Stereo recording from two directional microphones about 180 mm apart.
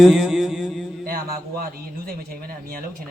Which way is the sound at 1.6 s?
55° right (ahead or behind).